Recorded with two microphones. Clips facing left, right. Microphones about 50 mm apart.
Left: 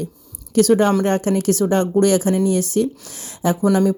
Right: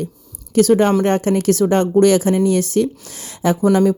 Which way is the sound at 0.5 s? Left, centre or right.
Right.